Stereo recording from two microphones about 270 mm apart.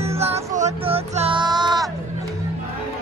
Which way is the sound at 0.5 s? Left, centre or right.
Right.